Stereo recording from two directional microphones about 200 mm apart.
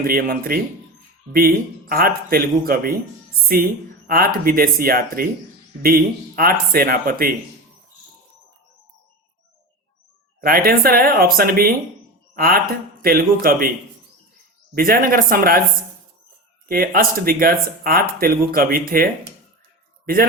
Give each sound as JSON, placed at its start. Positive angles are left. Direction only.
{"t": 0.0, "sound": "speech", "side_deg": -45}
{"t": 10.4, "sound": "speech", "side_deg": -45}
{"t": 14.8, "sound": "speech", "side_deg": -45}
{"t": 16.6, "sound": "speech", "side_deg": -45}